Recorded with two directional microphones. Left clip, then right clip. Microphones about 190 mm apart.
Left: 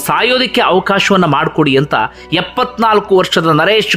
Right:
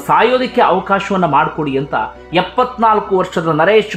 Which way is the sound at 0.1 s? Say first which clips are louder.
Even; 20° left (ahead or behind).